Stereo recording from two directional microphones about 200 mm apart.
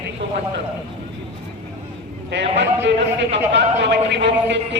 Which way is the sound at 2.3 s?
60° right (ahead or behind).